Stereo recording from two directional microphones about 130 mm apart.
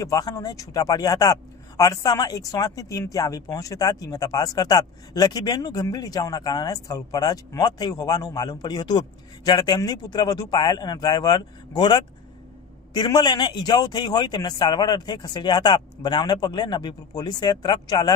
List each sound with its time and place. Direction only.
0.0 s a man's voice: 25° left (ahead or behind)